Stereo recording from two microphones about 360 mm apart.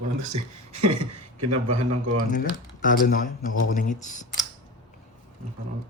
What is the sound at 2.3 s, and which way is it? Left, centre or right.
A man's voice, left.